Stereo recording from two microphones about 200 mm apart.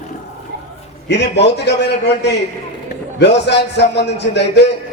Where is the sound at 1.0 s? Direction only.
60° left (ahead or behind).